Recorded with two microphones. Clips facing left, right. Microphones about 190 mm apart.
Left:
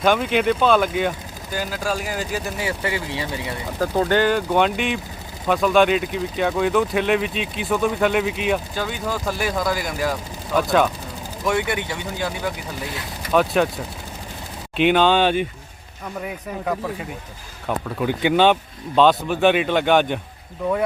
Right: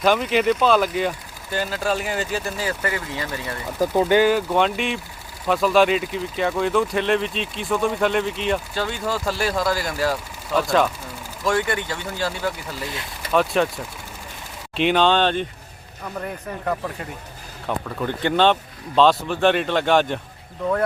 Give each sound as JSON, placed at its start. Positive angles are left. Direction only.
{"t": 0.0, "sound": "speech", "side_deg": 0}
{"t": 2.6, "sound": "speech", "side_deg": 20}
{"t": 3.8, "sound": "speech", "side_deg": -10}
{"t": 10.5, "sound": "speech", "side_deg": 0}
{"t": 11.4, "sound": "speech", "side_deg": 20}
{"t": 13.3, "sound": "speech", "side_deg": 0}